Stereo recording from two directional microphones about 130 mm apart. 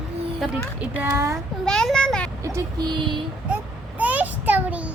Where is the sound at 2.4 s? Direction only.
25° right (ahead or behind).